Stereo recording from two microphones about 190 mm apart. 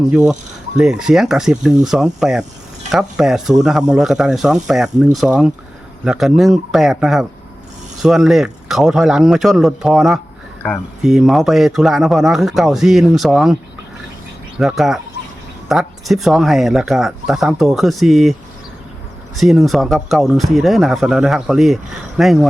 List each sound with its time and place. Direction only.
0.1 s speech: 5° right (ahead or behind)
14.6 s speech: centre (ahead or behind)
19.4 s speech: centre (ahead or behind)